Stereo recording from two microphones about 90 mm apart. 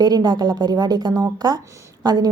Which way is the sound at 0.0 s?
50° right (ahead or behind).